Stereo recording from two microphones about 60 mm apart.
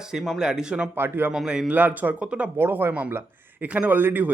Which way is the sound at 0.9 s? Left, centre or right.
Right.